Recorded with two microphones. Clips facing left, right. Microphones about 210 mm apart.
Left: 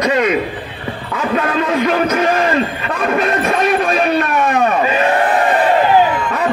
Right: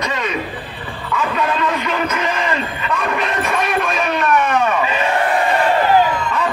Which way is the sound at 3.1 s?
40° left (ahead or behind).